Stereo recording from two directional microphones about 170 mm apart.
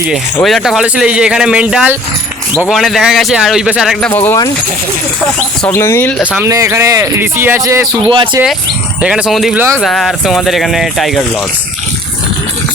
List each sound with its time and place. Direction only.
0.4 s speech: centre (ahead or behind)
4.1 s speech: 10° left (ahead or behind)
5.6 s speech: 15° left (ahead or behind)
6.4 s speech: 15° right (ahead or behind)
8.1 s speech: 30° right (ahead or behind)
9.0 s speech: 5° right (ahead or behind)